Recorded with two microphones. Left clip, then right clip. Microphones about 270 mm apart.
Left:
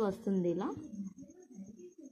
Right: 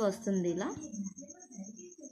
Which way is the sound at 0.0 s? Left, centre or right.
Centre.